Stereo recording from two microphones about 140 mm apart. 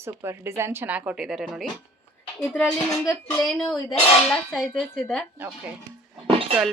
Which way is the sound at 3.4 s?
5° left (ahead or behind).